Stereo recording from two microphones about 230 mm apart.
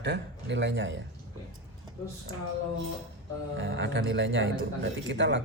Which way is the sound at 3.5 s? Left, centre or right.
Right.